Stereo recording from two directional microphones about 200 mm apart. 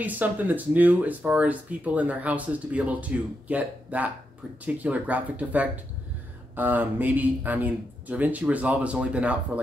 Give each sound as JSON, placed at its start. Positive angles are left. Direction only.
{"t": 0.0, "sound": "speech", "side_deg": -10}